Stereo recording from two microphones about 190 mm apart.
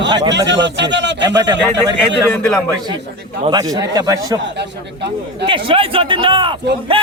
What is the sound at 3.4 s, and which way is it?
Speech, 20° right (ahead or behind).